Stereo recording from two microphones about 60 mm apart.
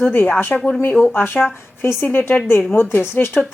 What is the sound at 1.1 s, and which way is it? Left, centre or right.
A woman's voice, left.